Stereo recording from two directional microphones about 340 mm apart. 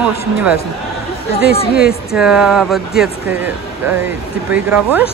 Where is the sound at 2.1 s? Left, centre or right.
Centre.